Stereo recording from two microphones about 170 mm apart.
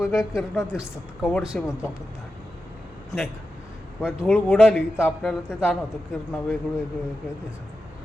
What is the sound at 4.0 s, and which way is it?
A man's voice, 10° left (ahead or behind).